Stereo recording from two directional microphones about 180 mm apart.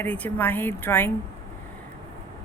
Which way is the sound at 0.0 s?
10° left (ahead or behind).